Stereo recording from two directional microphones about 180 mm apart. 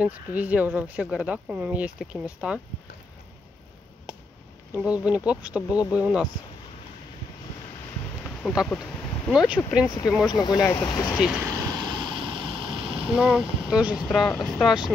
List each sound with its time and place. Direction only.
0.0 s speech: 10° right (ahead or behind)
4.7 s speech: 5° right (ahead or behind)
8.2 s a sound: 10° left (ahead or behind)
9.3 s speech: 5° right (ahead or behind)
9.8 s speech: 20° left (ahead or behind)
11.1 s speech: 5° right (ahead or behind)
11.4 s vehicle: 20° right (ahead or behind)
13.2 s speech: 5° right (ahead or behind)